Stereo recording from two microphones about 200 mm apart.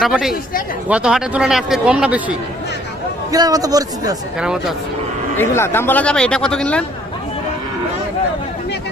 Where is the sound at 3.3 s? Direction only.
20° right (ahead or behind).